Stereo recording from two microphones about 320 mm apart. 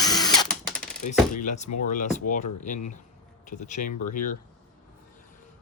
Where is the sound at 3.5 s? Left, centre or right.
Left.